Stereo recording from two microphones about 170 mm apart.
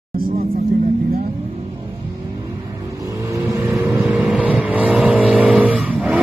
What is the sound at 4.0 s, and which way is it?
Vehicle, 5° right (ahead or behind).